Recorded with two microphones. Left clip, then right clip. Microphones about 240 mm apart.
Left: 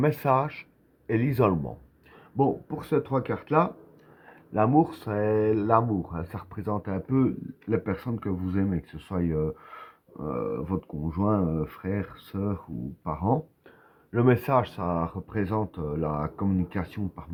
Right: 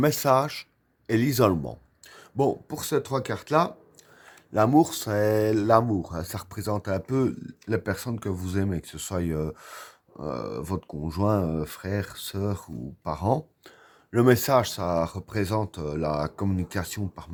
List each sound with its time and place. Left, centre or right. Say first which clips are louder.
0.0 s speech: right 2 dB; right